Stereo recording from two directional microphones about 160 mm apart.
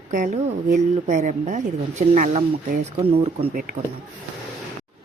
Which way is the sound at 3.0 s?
40° right (ahead or behind).